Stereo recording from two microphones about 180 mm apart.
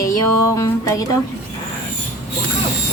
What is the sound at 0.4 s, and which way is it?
Speech, 15° left (ahead or behind).